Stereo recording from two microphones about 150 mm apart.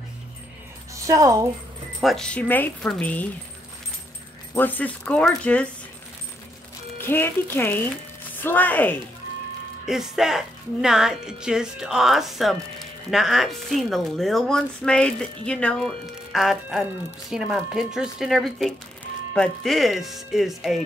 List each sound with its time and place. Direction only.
0.9 s a woman's voice: 20° right (ahead or behind)
2.0 s speech: centre (ahead or behind)
4.6 s speech: 10° left (ahead or behind)
7.0 s speech: 15° left (ahead or behind)
9.8 s a woman's voice: 5° right (ahead or behind)